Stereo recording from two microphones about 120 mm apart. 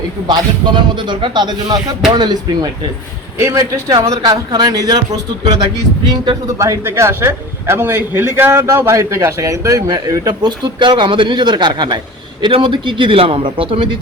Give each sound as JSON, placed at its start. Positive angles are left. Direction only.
{"t": 0.3, "sound": "speech", "side_deg": -40}
{"t": 3.3, "sound": "a man's voice", "side_deg": -20}
{"t": 6.6, "sound": "a man's voice", "side_deg": -25}